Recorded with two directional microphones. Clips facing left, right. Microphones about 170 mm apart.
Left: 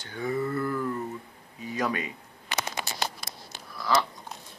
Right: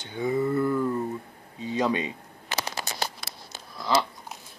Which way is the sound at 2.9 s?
20° right (ahead or behind).